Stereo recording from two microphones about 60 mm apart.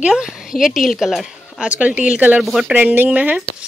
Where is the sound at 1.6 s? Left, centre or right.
Right.